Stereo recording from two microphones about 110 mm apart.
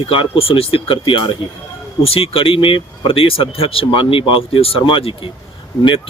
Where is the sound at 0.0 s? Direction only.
50° left (ahead or behind).